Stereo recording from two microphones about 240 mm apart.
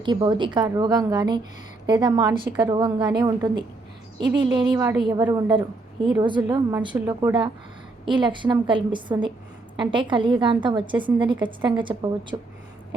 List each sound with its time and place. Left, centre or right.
0.0 s a woman's voice: centre